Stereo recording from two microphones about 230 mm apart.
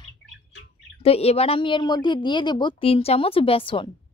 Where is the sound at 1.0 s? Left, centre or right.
Left.